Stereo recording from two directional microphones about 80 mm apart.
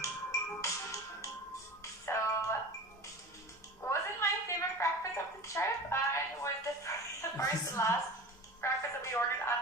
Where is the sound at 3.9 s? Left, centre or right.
Left.